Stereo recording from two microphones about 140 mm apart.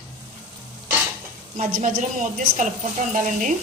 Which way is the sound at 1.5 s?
70° right (ahead or behind).